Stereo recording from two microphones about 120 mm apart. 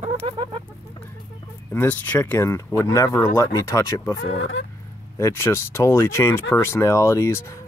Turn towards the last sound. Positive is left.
turn(degrees=25)  # may be behind; listen again after turning